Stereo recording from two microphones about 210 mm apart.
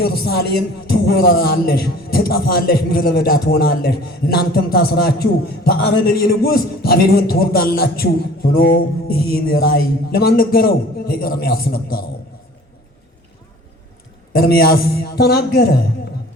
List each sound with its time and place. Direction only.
0.0 s a man's voice: 50° left (ahead or behind)
14.3 s a man's voice: 45° left (ahead or behind)